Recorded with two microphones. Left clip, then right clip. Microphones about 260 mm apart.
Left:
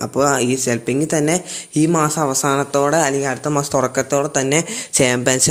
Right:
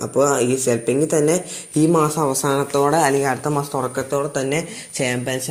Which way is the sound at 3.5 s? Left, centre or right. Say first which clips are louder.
Left 4 dB; left.